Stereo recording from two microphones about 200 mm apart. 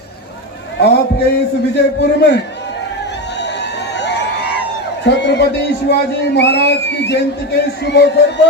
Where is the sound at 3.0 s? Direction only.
60° left (ahead or behind).